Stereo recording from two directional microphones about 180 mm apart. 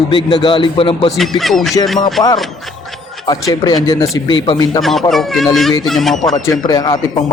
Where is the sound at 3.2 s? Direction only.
20° left (ahead or behind).